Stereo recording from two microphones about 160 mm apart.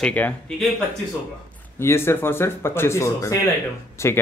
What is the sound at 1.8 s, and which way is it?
Speech, 15° left (ahead or behind).